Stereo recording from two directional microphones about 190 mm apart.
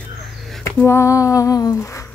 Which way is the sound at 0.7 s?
15° left (ahead or behind).